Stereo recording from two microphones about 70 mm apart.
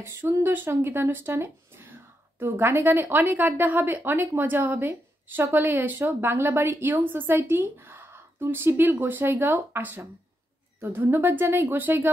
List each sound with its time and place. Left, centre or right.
0.0 s speech: right